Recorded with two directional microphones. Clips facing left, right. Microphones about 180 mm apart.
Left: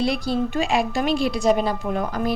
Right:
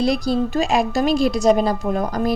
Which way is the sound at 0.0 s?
40° right (ahead or behind).